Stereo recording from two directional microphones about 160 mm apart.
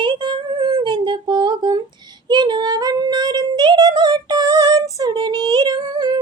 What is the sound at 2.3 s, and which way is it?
Female singing, 25° right (ahead or behind).